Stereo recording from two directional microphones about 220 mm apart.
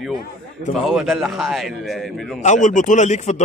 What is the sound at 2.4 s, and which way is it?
Speech, 35° left (ahead or behind).